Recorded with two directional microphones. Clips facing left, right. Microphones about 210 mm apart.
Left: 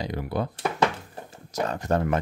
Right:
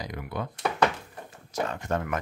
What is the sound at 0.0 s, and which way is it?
Speech, 30° left (ahead or behind).